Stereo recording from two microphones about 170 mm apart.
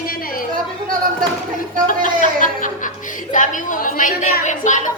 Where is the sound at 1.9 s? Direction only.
50° left (ahead or behind).